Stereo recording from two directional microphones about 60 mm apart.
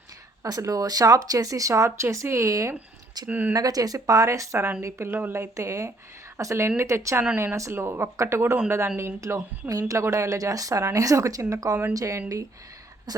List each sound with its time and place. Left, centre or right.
0.4 s speech: right
3.2 s speech: right
3.5 s a woman's voice: right
6.7 s speech: right
9.6 s a woman's voice: right